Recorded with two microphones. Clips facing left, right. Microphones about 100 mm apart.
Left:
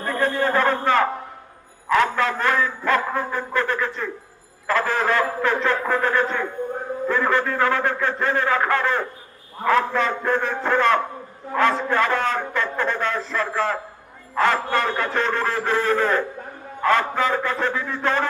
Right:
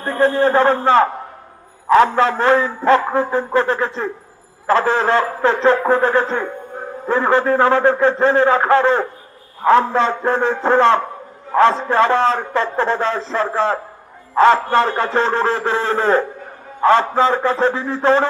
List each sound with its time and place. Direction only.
0.0 s a man's voice: 30° right (ahead or behind)